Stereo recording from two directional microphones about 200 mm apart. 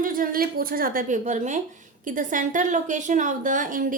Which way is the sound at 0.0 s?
45° right (ahead or behind).